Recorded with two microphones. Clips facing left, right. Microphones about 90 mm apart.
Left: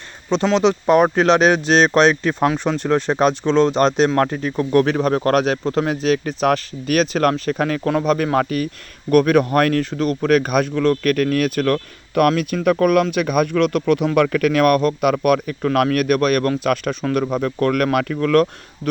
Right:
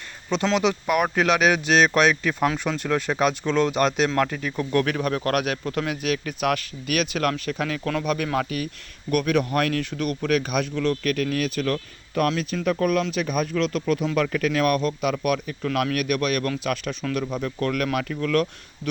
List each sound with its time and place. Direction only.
0.3 s speech: 20° left (ahead or behind); by 12.3 s 65° left (ahead or behind)
12.3 s speech: 55° left (ahead or behind)